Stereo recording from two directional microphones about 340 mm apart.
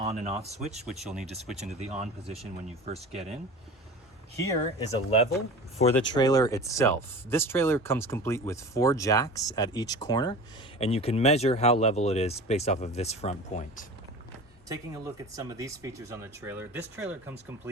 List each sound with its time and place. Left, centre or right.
0.0 s speech: centre
0.9 s speech: centre
1.5 s speech: centre
4.8 s speech: centre
14.7 s speech: centre